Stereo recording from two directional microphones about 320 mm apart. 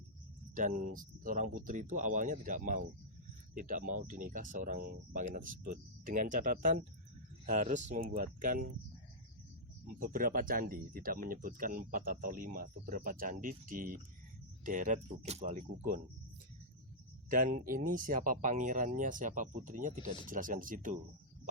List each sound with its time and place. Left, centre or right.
0.9 s speech: right
10.0 s speech: right
17.2 s speech: right